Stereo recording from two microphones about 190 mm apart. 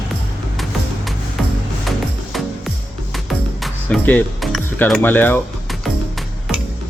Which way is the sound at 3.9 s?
5° left (ahead or behind).